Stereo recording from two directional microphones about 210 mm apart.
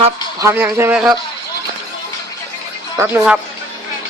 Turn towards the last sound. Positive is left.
turn(degrees=-5)  # may be behind; listen again after turning